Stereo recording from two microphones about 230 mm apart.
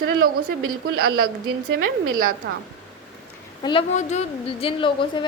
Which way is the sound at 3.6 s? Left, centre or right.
Left.